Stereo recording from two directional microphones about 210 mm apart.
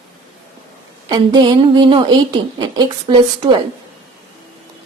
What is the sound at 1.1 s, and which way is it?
A woman's voice, 20° right (ahead or behind).